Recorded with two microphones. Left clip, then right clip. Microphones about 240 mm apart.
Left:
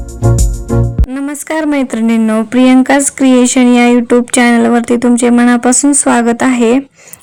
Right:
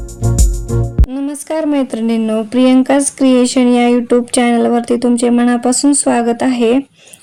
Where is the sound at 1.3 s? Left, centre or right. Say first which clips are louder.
Left 3 dB; left.